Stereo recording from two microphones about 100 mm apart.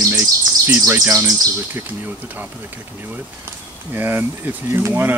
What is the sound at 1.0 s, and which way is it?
Speech, 30° right (ahead or behind).